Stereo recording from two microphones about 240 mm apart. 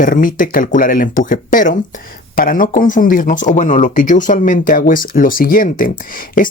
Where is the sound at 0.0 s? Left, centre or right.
Left.